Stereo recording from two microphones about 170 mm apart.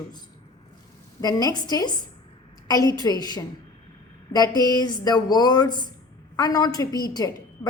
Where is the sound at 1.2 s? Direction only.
25° left (ahead or behind).